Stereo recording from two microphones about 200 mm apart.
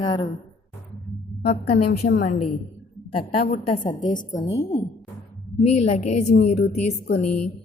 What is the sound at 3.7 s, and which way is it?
Speech, 25° left (ahead or behind).